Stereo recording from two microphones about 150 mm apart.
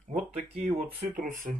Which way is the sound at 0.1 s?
65° right (ahead or behind).